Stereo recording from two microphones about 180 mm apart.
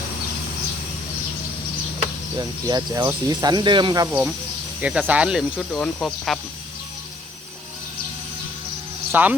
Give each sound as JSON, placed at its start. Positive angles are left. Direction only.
{"t": 2.4, "sound": "speech", "side_deg": -20}
{"t": 9.1, "sound": "speech", "side_deg": -10}